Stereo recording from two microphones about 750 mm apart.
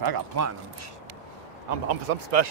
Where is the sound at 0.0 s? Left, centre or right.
Right.